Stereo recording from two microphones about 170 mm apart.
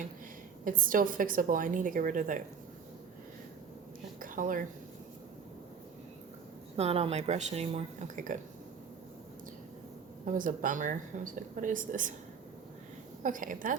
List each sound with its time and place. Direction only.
0.6 s speech: 55° right (ahead or behind)
4.2 s a sound: 50° right (ahead or behind)
6.7 s speech: 35° right (ahead or behind)
10.2 s speech: 50° right (ahead or behind)
13.2 s speech: 50° right (ahead or behind)